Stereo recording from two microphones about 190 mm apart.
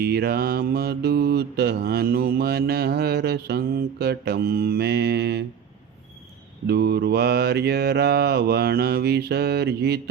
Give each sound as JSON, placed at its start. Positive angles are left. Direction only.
{"t": 0.0, "sound": "mantra", "side_deg": -55}
{"t": 6.7, "sound": "mantra", "side_deg": -60}